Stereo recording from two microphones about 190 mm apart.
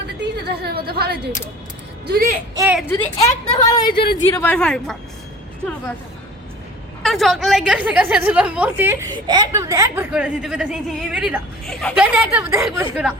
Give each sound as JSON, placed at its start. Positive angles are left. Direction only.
{"t": 0.3, "sound": "a woman's voice", "side_deg": -55}
{"t": 2.8, "sound": "a woman's voice", "side_deg": 15}
{"t": 4.4, "sound": "a woman's voice", "side_deg": 5}
{"t": 7.0, "sound": "a woman's voice", "side_deg": 0}
{"t": 12.1, "sound": "a woman's voice", "side_deg": -5}